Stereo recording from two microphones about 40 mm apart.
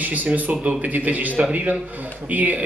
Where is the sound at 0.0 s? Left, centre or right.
Right.